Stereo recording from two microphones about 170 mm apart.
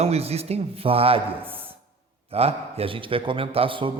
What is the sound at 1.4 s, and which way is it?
Speech, 10° right (ahead or behind).